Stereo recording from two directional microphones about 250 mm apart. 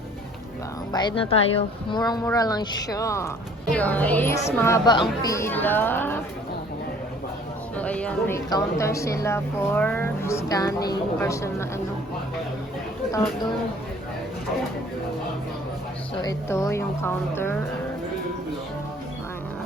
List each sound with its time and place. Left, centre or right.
0.9 s a woman's voice: centre
7.8 s a woman's voice: centre
13.1 s speech: centre
16.2 s speech: centre